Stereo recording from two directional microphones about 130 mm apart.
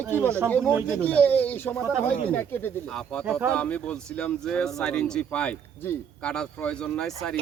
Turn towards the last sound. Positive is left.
turn(degrees=5)  # may be behind; listen again after turning